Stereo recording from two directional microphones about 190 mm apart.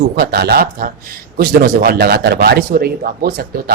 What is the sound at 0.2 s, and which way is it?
Speech, 55° right (ahead or behind).